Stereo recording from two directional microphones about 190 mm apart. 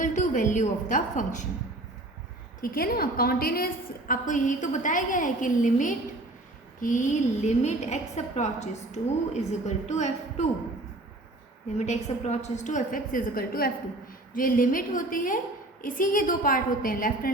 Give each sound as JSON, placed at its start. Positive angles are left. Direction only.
{"t": 0.0, "sound": "a woman's voice", "side_deg": 40}
{"t": 2.6, "sound": "a woman's voice", "side_deg": 50}
{"t": 11.8, "sound": "a woman's voice", "side_deg": 35}